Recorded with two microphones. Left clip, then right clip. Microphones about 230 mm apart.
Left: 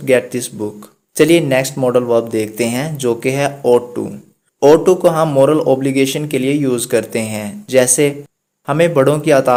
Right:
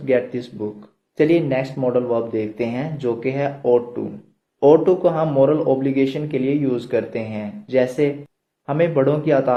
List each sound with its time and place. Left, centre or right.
0.0 s speech: left